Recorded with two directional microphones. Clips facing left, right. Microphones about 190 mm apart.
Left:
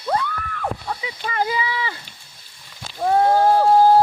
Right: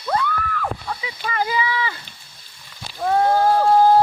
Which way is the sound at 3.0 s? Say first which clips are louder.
Left 1 dB; 25° left (ahead or behind).